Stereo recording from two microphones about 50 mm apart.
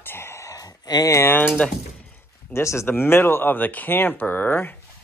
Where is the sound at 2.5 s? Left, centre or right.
Left.